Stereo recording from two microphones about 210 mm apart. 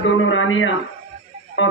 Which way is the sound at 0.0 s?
65° left (ahead or behind).